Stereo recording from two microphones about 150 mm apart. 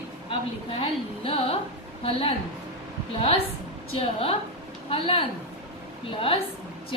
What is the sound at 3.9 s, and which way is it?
A woman's voice, 40° left (ahead or behind).